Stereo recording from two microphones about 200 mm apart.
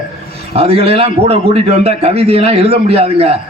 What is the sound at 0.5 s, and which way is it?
A man's voice, 30° right (ahead or behind).